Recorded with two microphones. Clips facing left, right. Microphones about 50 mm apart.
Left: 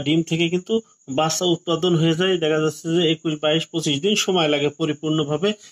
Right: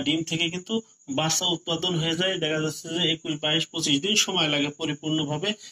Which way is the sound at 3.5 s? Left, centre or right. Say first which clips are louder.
Left 3 dB; left.